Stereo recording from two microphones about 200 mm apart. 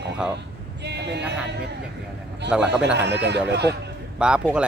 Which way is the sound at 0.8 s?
60° right (ahead or behind).